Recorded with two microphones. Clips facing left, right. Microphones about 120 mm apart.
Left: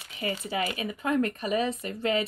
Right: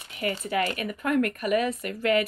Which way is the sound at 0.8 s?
60° right (ahead or behind).